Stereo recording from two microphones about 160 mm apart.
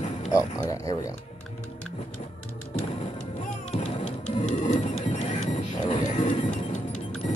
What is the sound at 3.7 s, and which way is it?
Music, 50° left (ahead or behind).